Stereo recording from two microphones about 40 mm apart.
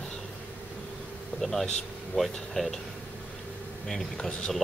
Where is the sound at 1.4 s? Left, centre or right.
Centre.